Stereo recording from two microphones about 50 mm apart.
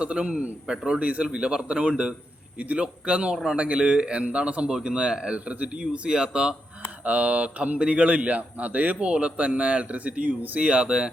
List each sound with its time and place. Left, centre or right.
0.0 s a man's voice: right
7.0 s a man's voice: right